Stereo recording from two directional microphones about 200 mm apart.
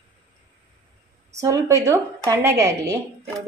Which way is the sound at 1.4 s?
15° right (ahead or behind).